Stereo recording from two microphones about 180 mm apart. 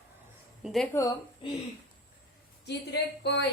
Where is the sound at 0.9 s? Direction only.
15° left (ahead or behind).